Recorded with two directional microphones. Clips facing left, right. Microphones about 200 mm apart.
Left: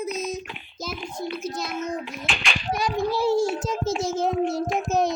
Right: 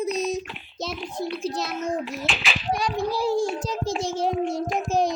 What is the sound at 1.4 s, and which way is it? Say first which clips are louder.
Speech: right 3 dB; 30° right (ahead or behind).